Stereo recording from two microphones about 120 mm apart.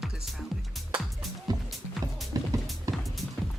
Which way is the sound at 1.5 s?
35° right (ahead or behind).